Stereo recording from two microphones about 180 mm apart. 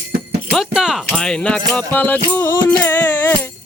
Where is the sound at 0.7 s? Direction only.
Centre (ahead or behind).